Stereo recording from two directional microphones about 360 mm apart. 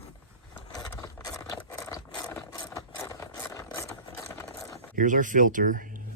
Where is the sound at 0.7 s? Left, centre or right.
Centre.